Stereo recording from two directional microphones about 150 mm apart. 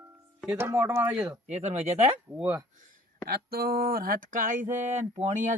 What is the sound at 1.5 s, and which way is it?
Speech, 45° right (ahead or behind).